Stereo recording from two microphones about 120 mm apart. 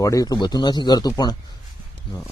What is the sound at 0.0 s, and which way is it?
Speech, 30° left (ahead or behind).